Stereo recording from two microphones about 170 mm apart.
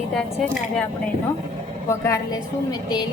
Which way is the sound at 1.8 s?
15° left (ahead or behind).